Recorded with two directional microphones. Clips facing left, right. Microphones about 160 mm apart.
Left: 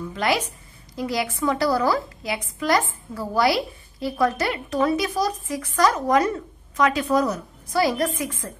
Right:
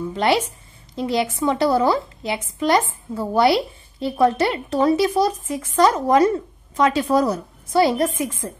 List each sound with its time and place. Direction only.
0.1 s a woman's voice: 30° right (ahead or behind)